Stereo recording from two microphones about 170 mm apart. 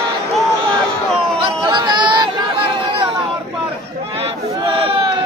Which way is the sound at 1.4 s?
25° right (ahead or behind).